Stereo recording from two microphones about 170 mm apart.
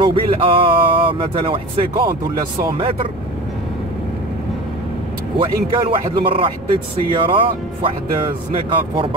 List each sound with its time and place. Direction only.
0.0 s speech: 30° right (ahead or behind)
5.4 s speech: 30° right (ahead or behind)